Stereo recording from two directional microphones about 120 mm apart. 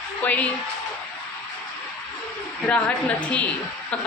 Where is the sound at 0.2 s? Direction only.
15° left (ahead or behind).